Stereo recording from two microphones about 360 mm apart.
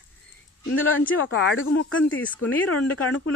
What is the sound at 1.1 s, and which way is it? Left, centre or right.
Speech, left.